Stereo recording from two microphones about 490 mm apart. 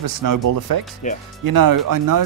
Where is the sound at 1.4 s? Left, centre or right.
Right.